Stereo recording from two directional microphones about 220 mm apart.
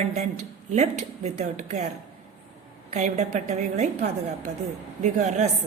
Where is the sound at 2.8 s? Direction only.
30° right (ahead or behind).